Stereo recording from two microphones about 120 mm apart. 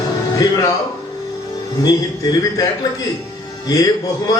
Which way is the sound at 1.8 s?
30° left (ahead or behind).